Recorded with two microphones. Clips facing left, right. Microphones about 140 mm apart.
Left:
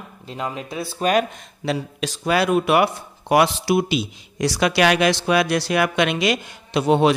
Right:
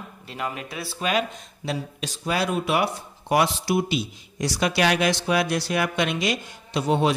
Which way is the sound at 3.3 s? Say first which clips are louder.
Left 4 dB; 80° left.